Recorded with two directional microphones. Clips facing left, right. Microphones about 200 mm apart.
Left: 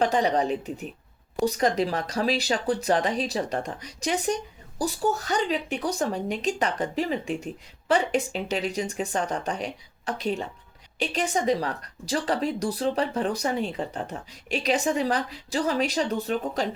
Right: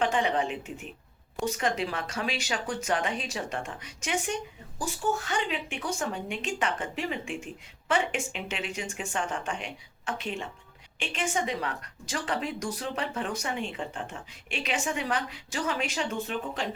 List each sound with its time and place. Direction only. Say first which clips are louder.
0.0 s speech: left 4 dB; 40° left (ahead or behind)